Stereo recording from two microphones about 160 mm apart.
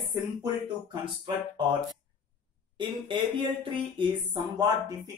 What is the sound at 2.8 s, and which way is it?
Speech, 30° right (ahead or behind).